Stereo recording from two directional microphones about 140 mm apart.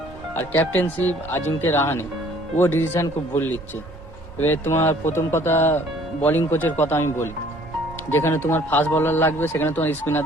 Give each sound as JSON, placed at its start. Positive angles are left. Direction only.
{"t": 0.3, "sound": "a man's voice", "side_deg": 15}